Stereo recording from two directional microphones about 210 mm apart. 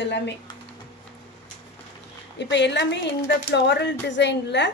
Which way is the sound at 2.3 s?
55° left (ahead or behind).